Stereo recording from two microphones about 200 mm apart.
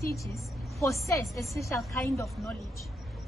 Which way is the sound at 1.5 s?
15° left (ahead or behind).